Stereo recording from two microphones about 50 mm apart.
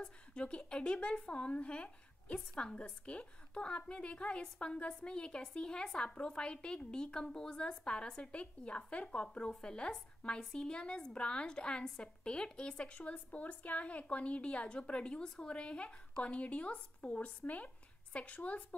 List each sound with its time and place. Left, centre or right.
0.0 s a woman's voice: centre